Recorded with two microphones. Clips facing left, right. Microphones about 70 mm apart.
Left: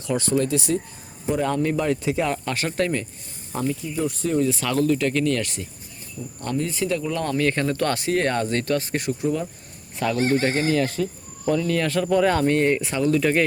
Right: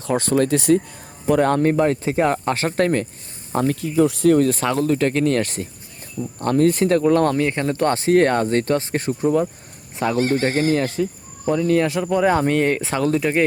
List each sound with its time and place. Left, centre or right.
0.0 s speech: right
3.8 s speech: right
4.6 s speech: right
6.4 s speech: right
7.4 s speech: right
10.2 s speech: left
10.4 s speech: right
11.9 s speech: centre